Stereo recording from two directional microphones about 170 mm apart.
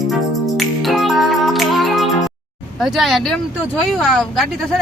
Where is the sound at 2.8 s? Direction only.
Centre (ahead or behind).